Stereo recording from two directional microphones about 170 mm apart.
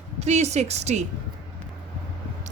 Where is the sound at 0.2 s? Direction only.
40° right (ahead or behind).